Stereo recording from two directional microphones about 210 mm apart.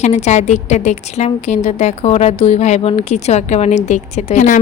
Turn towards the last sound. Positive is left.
turn(degrees=35)  # may be behind; listen again after turning